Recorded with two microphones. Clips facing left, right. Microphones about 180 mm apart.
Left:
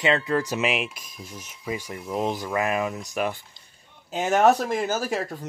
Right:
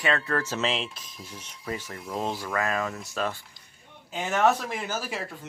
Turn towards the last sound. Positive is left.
turn(degrees=45)  # may be behind; listen again after turning